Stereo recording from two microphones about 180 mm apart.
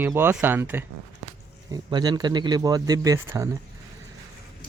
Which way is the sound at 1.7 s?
20° right (ahead or behind).